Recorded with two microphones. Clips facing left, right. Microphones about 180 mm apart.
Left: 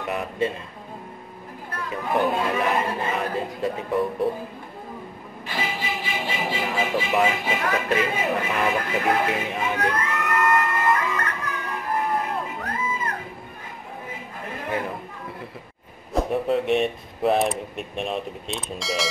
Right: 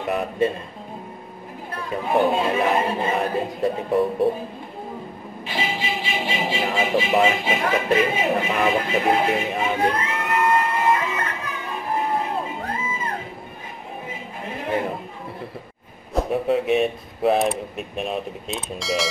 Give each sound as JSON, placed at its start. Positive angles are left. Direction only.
{"t": 0.0, "sound": "speech", "side_deg": -25}
{"t": 1.7, "sound": "speech", "side_deg": -25}
{"t": 5.5, "sound": "music", "side_deg": -25}
{"t": 6.1, "sound": "speech", "side_deg": -25}
{"t": 11.7, "sound": "music", "side_deg": -25}
{"t": 14.4, "sound": "a sound", "side_deg": -25}
{"t": 16.1, "sound": "speech", "side_deg": 0}